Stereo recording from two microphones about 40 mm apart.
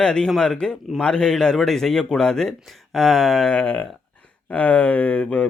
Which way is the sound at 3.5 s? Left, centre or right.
Left.